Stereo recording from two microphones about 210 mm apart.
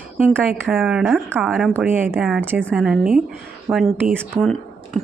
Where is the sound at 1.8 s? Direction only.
10° right (ahead or behind).